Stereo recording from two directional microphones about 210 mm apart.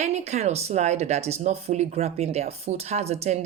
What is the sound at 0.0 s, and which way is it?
Speech, 30° right (ahead or behind).